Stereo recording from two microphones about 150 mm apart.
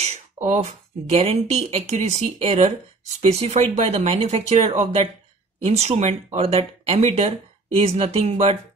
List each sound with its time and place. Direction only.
0.0 s speech: 50° right (ahead or behind)